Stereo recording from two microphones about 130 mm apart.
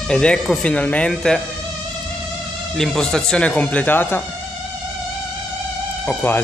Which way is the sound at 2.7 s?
Centre (ahead or behind).